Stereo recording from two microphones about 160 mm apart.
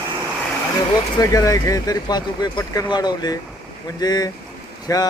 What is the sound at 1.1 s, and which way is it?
Speech, 20° left (ahead or behind).